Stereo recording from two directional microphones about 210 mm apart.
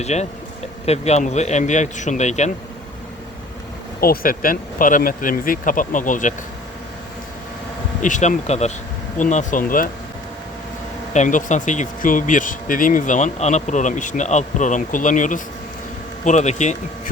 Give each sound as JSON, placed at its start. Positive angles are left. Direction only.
{"t": 0.0, "sound": "speech", "side_deg": 30}
{"t": 4.0, "sound": "speech", "side_deg": 45}
{"t": 8.0, "sound": "speech", "side_deg": 35}
{"t": 11.1, "sound": "speech", "side_deg": 35}